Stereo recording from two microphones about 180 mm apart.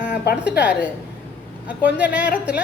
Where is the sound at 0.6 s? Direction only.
10° right (ahead or behind).